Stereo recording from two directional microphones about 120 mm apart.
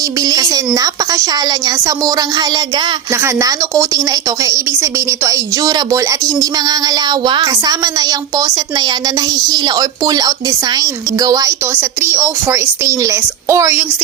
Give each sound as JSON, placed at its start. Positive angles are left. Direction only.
{"t": 0.2, "sound": "a woman's voice", "side_deg": -30}
{"t": 11.7, "sound": "speech", "side_deg": -15}